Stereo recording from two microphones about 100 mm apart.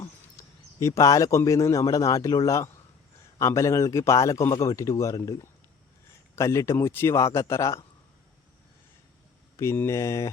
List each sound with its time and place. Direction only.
0.0 s a man's voice: 30° left (ahead or behind)
9.6 s speech: 30° left (ahead or behind)